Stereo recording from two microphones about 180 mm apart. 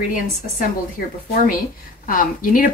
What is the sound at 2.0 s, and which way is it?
Speech, 50° left (ahead or behind).